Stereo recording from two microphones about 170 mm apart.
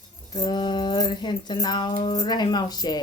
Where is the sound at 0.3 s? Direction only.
25° left (ahead or behind).